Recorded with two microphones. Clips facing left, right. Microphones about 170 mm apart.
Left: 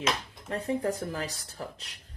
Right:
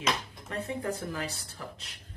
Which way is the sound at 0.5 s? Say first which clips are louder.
Left 4 dB; 35° left (ahead or behind).